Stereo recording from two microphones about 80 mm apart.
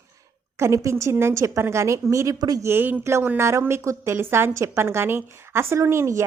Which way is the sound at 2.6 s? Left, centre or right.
Right.